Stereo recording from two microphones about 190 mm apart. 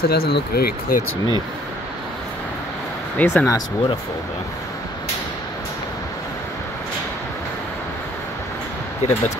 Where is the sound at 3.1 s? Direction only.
10° left (ahead or behind).